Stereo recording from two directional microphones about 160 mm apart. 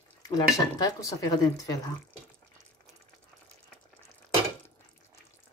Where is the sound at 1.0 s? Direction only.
25° left (ahead or behind).